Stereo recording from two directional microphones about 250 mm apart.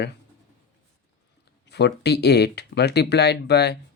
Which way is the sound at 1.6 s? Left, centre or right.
Left.